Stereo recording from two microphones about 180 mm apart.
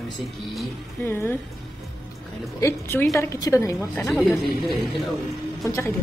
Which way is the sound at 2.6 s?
15° left (ahead or behind).